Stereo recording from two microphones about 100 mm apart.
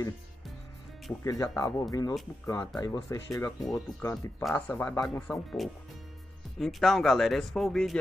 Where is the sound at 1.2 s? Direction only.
35° left (ahead or behind).